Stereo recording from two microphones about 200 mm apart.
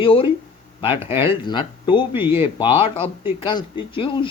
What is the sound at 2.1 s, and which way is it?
Speech, 10° right (ahead or behind).